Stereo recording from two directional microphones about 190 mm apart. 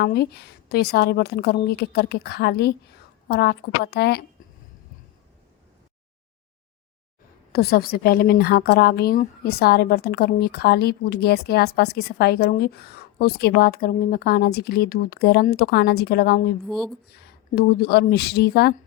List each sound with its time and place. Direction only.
0.0 s a woman's voice: 55° left (ahead or behind)
7.5 s a woman's voice: 55° left (ahead or behind)
16.6 s speech: centre (ahead or behind)
17.2 s a woman's voice: 55° left (ahead or behind)